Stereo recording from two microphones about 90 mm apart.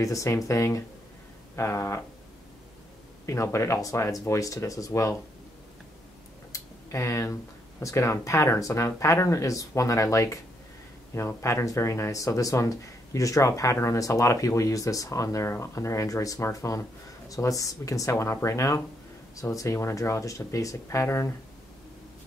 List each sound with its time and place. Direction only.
0.0 s speech: 35° left (ahead or behind)
3.3 s speech: 35° left (ahead or behind)
6.5 s a sound: 35° left (ahead or behind)
7.8 s speech: 35° left (ahead or behind)